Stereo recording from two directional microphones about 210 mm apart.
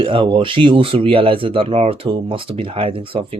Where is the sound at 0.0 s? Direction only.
25° right (ahead or behind).